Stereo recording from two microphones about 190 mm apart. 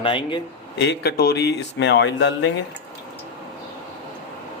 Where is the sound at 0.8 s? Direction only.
60° left (ahead or behind).